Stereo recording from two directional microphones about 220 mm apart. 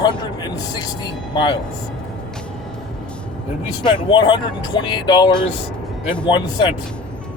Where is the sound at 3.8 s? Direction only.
20° left (ahead or behind).